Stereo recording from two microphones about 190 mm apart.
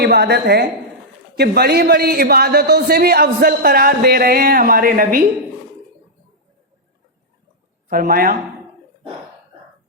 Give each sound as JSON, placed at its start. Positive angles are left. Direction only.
{"t": 0.0, "sound": "a woman's voice", "side_deg": -55}
{"t": 7.9, "sound": "a man's voice", "side_deg": -50}